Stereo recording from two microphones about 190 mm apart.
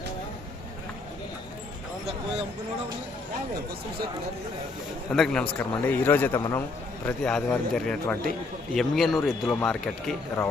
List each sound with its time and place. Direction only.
5.1 s a man's voice: 5° left (ahead or behind); by 6.6 s 20° left (ahead or behind)
7.0 s a man's voice: 5° left (ahead or behind)
8.7 s speech: centre (ahead or behind)